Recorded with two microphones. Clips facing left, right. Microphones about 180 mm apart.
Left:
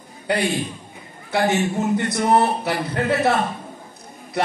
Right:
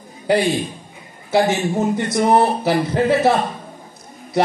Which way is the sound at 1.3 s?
25° right (ahead or behind).